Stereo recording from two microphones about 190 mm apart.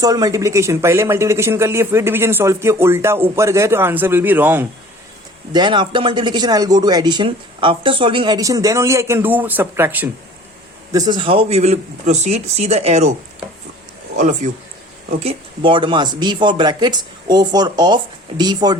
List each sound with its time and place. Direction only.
0.0 s speech: 20° right (ahead or behind)
5.5 s speech: 25° right (ahead or behind)
10.9 s speech: 20° right (ahead or behind)
14.2 s speech: 40° right (ahead or behind); by 18.8 s 20° right (ahead or behind)